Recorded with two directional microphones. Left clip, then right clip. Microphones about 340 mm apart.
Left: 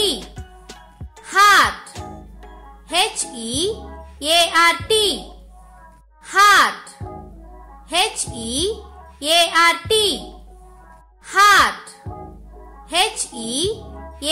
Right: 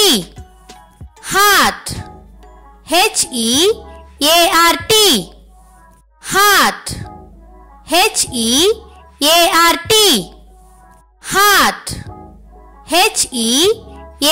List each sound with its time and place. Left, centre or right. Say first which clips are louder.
0.2 s music: right 6 dB; centre
1.2 s music: right 2 dB; right
2.9 s speech: right 7 dB; right
6.2 s speech: right 2 dB; right
7.8 s speech: right 7 dB; right
11.2 s speech: right 2 dB; right
12.8 s speech: right 7 dB; right